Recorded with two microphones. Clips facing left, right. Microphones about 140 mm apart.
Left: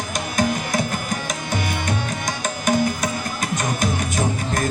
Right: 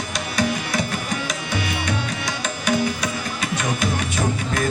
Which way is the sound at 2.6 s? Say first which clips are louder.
Left 2 dB; 45° left (ahead or behind).